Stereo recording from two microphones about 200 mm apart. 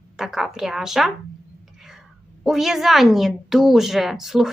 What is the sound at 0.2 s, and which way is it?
Speech, centre (ahead or behind).